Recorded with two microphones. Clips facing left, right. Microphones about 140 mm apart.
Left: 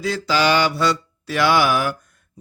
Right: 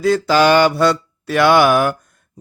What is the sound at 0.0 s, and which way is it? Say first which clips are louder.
Speech: right 7 dB; 50° right (ahead or behind).